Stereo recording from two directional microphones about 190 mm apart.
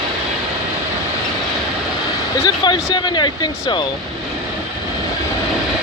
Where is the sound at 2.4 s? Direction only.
30° left (ahead or behind).